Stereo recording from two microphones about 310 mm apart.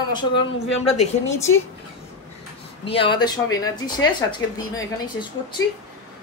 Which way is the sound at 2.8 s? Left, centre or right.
Centre.